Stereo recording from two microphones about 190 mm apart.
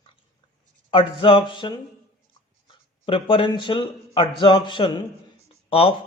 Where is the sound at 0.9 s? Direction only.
25° left (ahead or behind).